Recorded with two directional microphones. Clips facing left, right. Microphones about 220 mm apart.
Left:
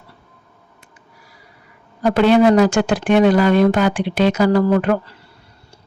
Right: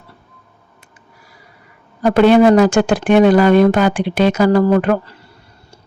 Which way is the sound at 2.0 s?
55° right (ahead or behind).